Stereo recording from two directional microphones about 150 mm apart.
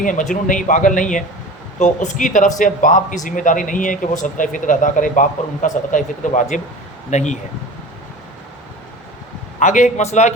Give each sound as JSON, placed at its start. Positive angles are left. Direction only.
{"t": 0.0, "sound": "a man's voice", "side_deg": 60}
{"t": 9.6, "sound": "a man's voice", "side_deg": 55}